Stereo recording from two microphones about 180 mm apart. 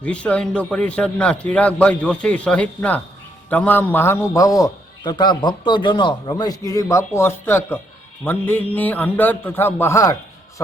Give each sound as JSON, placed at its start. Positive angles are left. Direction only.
{"t": 0.0, "sound": "a man's voice", "side_deg": 5}